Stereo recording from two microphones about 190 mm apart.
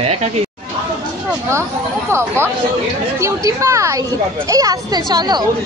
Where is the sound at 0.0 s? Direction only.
35° right (ahead or behind).